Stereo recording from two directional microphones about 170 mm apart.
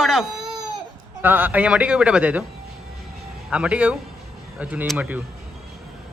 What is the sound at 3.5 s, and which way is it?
A man's voice, 5° right (ahead or behind).